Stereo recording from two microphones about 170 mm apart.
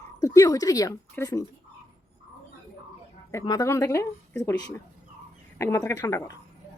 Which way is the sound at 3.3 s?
20° left (ahead or behind).